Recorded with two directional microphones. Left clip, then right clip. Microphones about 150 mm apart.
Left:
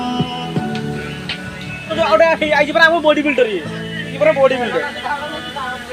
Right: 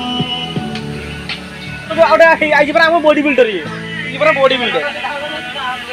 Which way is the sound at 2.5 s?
50° right (ahead or behind).